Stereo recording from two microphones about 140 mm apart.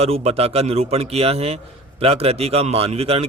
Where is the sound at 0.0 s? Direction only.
45° right (ahead or behind).